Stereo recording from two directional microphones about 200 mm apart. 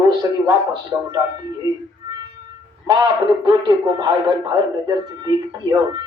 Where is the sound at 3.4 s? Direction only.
20° right (ahead or behind).